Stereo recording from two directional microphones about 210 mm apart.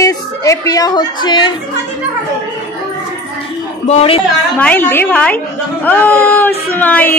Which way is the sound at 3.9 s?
25° left (ahead or behind).